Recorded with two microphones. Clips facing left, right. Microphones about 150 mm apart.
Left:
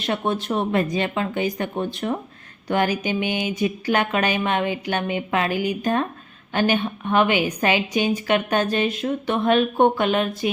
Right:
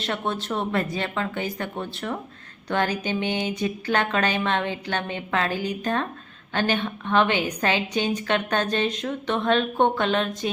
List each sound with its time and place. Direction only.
0.0 s speech: 15° left (ahead or behind)